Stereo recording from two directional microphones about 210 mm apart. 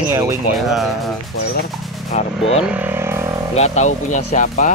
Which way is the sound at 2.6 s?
10° right (ahead or behind).